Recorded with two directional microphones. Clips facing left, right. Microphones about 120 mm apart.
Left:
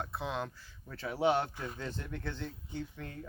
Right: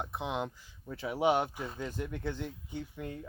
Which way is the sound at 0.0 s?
20° right (ahead or behind).